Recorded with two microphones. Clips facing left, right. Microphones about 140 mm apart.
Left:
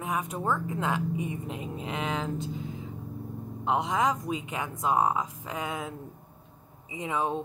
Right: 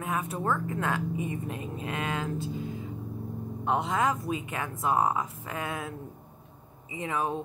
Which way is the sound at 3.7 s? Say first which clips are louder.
Left 1 dB; 15° left (ahead or behind).